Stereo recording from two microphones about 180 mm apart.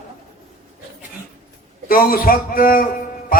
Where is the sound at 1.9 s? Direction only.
55° left (ahead or behind).